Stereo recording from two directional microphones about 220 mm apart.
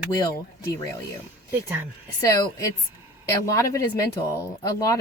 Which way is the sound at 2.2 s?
15° left (ahead or behind).